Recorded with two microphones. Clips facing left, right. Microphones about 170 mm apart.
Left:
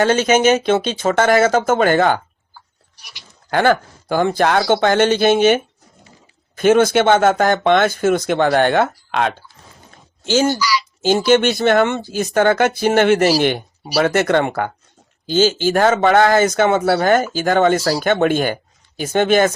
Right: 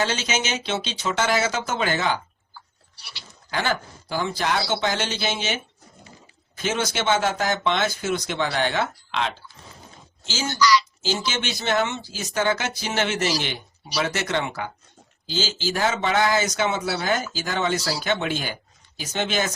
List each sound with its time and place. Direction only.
0.0 s speech: 55° left (ahead or behind)
2.9 s goat: 15° left (ahead or behind)
3.5 s speech: 55° left (ahead or behind)
10.6 s speech: 10° left (ahead or behind)
11.0 s speech: 55° left (ahead or behind)